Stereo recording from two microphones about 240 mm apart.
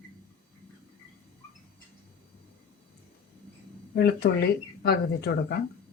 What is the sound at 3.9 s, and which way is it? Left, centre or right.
A woman's voice, left.